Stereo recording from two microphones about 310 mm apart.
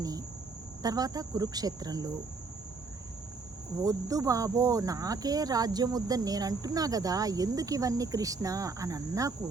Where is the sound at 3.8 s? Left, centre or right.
Centre.